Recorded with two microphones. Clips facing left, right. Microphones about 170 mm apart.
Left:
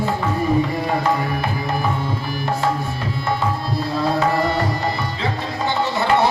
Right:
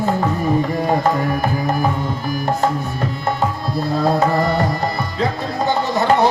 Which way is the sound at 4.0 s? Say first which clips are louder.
Right 2 dB; 45° right (ahead or behind).